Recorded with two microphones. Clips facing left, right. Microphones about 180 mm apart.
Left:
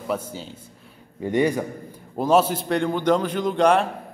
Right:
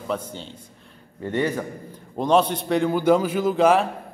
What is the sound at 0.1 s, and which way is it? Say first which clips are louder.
A man's voice: left 1 dB; 5° left (ahead or behind).